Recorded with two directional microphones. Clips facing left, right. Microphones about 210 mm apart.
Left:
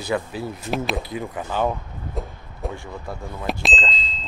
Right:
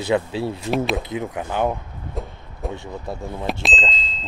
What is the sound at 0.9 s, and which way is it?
Speech, 20° right (ahead or behind).